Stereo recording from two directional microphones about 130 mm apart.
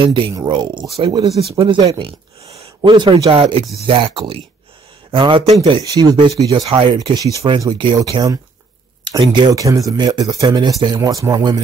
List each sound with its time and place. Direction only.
0.0 s speech: 40° right (ahead or behind)
6.5 s speech: 45° right (ahead or behind)
7.0 s speech: 30° right (ahead or behind)
11.0 s speech: 25° right (ahead or behind)